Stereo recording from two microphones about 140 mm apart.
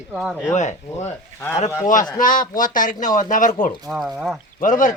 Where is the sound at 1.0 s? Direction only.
15° left (ahead or behind).